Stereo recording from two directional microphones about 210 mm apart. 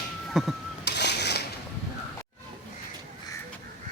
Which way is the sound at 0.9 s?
55° left (ahead or behind).